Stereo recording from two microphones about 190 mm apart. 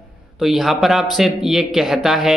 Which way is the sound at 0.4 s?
Centre (ahead or behind).